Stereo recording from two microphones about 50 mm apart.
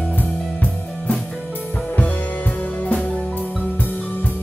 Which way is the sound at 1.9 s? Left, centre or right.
Left.